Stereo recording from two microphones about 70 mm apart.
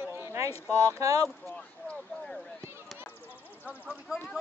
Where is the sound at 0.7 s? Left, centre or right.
Right.